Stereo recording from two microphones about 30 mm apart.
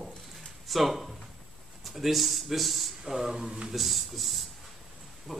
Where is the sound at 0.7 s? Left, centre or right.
Centre.